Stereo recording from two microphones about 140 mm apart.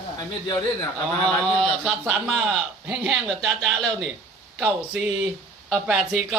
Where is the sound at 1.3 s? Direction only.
5° left (ahead or behind).